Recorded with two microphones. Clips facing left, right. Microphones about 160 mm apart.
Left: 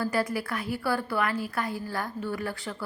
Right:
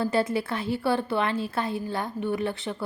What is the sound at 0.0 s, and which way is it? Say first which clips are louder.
A woman's voice: right 3 dB; 25° right (ahead or behind).